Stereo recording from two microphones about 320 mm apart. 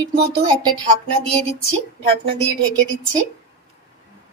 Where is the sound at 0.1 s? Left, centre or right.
Right.